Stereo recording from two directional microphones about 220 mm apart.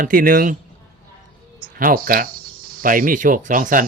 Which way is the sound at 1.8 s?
40° right (ahead or behind).